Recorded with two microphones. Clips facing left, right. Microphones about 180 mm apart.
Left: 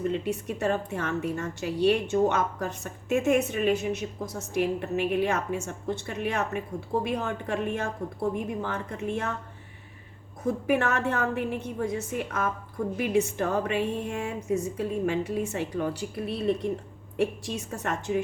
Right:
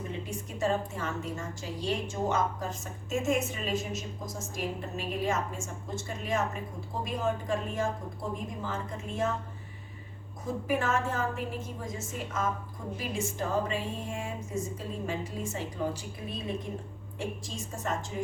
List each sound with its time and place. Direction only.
0.3 s a woman's voice: 65° left (ahead or behind)
10.4 s a woman's voice: 65° left (ahead or behind)